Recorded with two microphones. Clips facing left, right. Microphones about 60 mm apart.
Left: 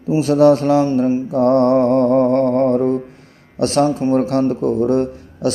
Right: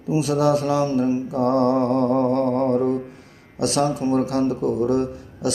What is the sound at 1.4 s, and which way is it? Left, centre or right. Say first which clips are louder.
Mantra: left 6 dB; left.